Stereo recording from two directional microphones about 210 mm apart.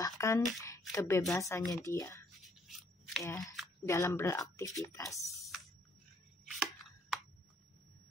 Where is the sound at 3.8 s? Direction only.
15° left (ahead or behind).